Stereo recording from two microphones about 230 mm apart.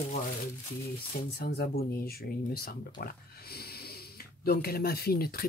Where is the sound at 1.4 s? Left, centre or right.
Left.